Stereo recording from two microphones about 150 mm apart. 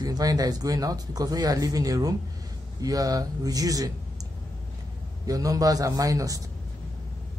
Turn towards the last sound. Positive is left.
turn(degrees=-25)  # may be behind; listen again after turning